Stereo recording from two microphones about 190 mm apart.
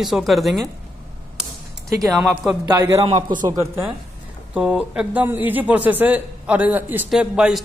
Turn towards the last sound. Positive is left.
turn(degrees=-5)  # may be behind; listen again after turning